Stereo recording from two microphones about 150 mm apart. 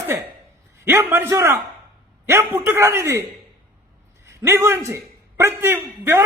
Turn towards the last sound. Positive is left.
turn(degrees=-15)  # may be behind; listen again after turning